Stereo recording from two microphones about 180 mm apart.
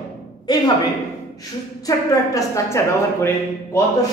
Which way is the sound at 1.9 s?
20° left (ahead or behind).